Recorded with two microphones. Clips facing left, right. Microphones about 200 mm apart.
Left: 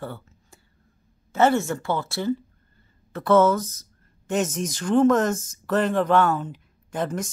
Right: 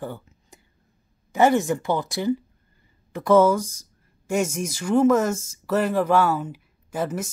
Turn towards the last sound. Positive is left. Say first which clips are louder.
# even
turn(degrees=-5)  # may be behind; listen again after turning